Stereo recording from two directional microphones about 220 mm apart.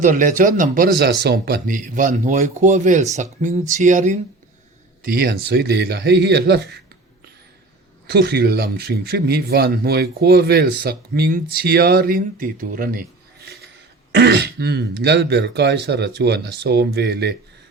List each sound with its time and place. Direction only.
0.0 s speech: 35° right (ahead or behind)
5.0 s speech: 45° right (ahead or behind)
8.0 s speech: 45° right (ahead or behind)
14.1 s speech: 50° right (ahead or behind)